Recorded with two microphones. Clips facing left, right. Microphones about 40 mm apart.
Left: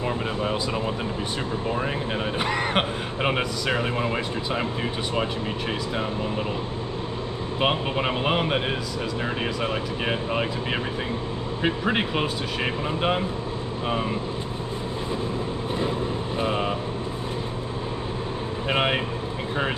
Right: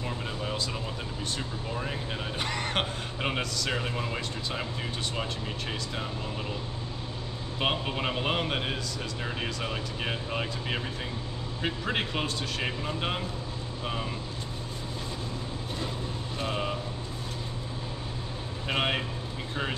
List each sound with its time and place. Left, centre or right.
0.0 s speech: left
2.3 s speech: centre
7.6 s speech: centre
16.3 s vehicle: centre
18.7 s speech: centre